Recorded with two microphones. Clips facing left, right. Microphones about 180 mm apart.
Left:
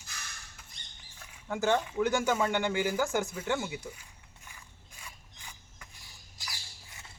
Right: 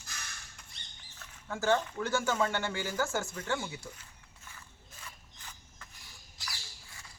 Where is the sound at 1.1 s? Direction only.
15° left (ahead or behind).